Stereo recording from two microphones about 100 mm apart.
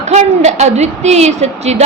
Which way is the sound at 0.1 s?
90° right.